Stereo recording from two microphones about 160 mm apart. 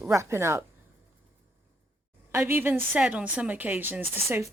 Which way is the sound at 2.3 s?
15° right (ahead or behind).